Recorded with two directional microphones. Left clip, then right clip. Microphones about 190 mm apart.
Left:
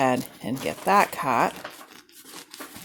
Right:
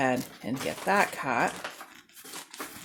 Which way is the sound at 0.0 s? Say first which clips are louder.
Left 5 dB; 30° left (ahead or behind).